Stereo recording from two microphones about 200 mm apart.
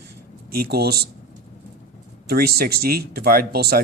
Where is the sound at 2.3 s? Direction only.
50° right (ahead or behind).